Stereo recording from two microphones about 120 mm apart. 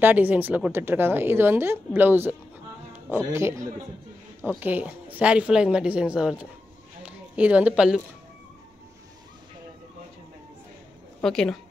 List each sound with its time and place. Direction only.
0.0 s speech: 15° right (ahead or behind)
4.5 s speech: 15° right (ahead or behind)
11.2 s speech: 5° left (ahead or behind)